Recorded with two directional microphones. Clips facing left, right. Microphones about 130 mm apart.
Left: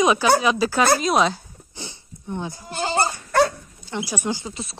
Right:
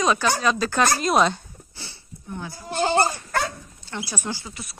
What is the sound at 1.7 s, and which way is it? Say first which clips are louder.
Sniff: left 6 dB; 20° left (ahead or behind).